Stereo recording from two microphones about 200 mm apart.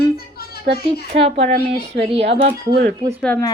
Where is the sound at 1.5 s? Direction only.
55° right (ahead or behind).